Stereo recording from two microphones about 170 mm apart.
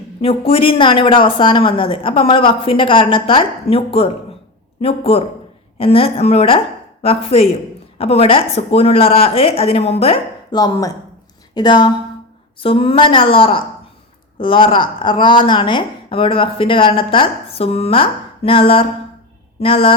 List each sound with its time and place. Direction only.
0.2 s speech: 35° left (ahead or behind)
10.5 s speech: 25° left (ahead or behind)